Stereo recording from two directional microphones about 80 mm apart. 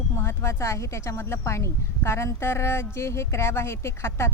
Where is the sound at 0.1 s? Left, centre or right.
Left.